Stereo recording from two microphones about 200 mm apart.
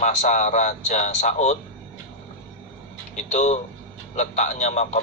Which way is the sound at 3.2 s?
35° left (ahead or behind).